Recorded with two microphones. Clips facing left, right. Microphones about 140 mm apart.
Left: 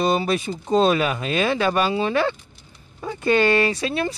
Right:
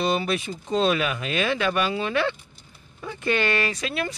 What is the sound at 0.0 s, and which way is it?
Speech, 35° left (ahead or behind).